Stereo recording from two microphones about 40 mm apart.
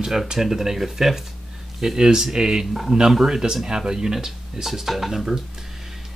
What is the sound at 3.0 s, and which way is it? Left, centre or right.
Speech, centre.